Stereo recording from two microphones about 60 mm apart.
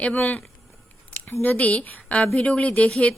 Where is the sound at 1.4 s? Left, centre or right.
Left.